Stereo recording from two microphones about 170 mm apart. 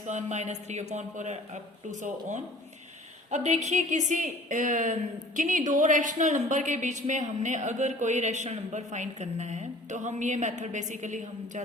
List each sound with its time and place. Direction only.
0.1 s a woman's voice: 45° right (ahead or behind)